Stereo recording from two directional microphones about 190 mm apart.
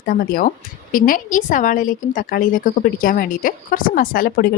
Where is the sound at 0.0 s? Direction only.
50° left (ahead or behind).